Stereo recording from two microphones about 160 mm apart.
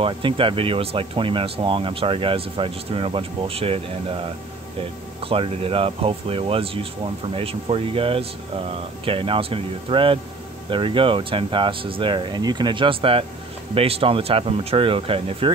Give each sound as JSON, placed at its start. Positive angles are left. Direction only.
{"t": 0.0, "sound": "speech", "side_deg": -30}